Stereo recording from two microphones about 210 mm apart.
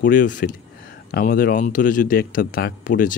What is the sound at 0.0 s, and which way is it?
A man's voice, 40° left (ahead or behind).